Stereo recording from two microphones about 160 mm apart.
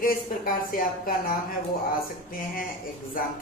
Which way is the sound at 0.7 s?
60° left (ahead or behind).